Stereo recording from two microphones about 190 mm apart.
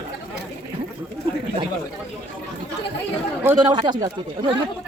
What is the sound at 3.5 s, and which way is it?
Speech, 25° right (ahead or behind).